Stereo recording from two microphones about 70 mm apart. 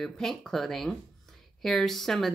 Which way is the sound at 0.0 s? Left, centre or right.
Centre.